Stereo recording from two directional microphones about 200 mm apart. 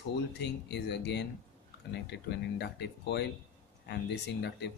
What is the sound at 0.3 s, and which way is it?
Speech, 60° left (ahead or behind).